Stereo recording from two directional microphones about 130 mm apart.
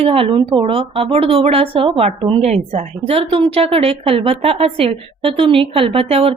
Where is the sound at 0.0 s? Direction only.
45° right (ahead or behind).